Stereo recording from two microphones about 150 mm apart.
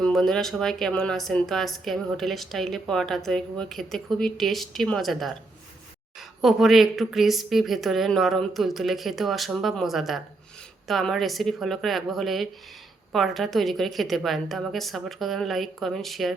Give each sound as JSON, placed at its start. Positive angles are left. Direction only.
{"t": 0.0, "sound": "a woman's voice", "side_deg": 5}